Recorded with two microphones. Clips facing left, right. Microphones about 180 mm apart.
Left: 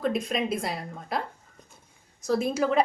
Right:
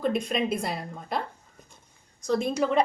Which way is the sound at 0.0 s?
Centre (ahead or behind).